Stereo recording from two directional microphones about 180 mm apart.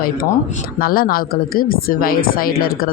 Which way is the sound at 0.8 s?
55° left (ahead or behind).